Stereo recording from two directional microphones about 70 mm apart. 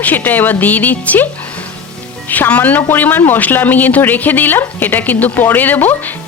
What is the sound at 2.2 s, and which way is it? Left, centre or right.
A woman's voice, left.